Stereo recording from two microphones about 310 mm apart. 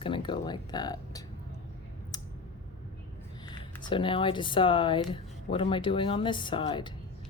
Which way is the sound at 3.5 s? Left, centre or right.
Centre.